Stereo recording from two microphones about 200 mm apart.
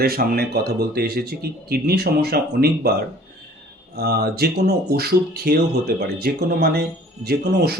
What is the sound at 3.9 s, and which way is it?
Speech, 55° right (ahead or behind).